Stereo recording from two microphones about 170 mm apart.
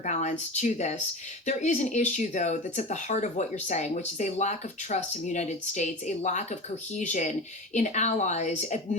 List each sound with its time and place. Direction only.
0.0 s speech: 45° left (ahead or behind)